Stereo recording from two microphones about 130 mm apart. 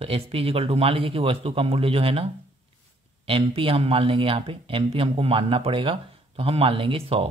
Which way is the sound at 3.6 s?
45° right (ahead or behind).